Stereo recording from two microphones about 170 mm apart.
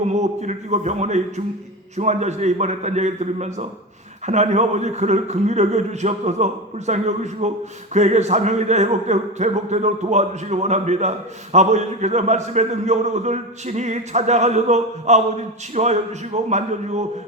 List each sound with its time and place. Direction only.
0.1 s a man's voice: 45° right (ahead or behind)